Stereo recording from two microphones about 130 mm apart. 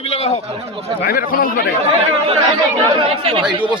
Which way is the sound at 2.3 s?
45° right (ahead or behind).